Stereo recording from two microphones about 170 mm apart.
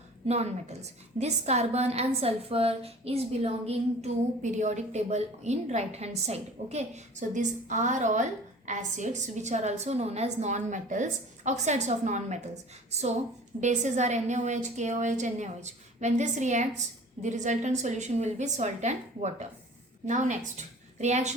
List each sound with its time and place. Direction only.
0.3 s a woman's voice: 40° right (ahead or behind)